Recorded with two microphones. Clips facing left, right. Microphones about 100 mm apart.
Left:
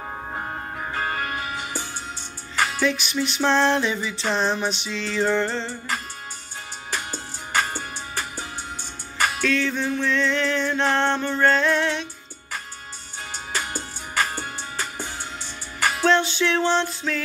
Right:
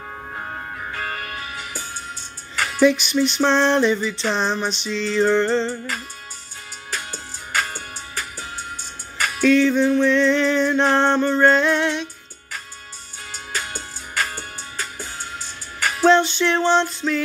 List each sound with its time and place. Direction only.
1.0 s music: 30° left (ahead or behind)
2.8 s music: centre (ahead or behind)
6.9 s music: 20° left (ahead or behind)
9.4 s music: 10° right (ahead or behind)
14.1 s music: 25° left (ahead or behind)
16.1 s music: 5° left (ahead or behind)